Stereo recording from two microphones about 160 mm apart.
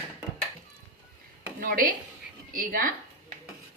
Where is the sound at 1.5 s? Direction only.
60° right (ahead or behind).